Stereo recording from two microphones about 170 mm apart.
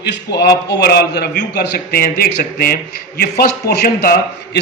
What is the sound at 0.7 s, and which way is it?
A man's voice, 70° left (ahead or behind).